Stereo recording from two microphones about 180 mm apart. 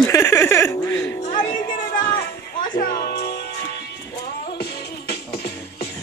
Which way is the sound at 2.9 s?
60° left (ahead or behind).